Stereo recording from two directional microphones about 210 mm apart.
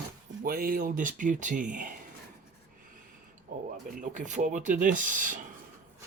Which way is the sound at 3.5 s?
45° right (ahead or behind).